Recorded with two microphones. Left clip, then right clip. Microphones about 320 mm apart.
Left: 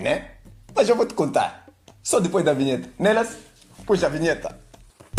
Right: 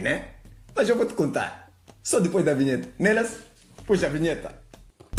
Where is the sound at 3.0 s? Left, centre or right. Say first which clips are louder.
Left 3 dB; left.